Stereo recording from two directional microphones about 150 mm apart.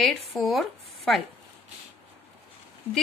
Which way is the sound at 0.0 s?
Centre (ahead or behind).